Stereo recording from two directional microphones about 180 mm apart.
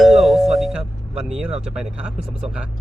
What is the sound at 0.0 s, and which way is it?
Speech, centre (ahead or behind).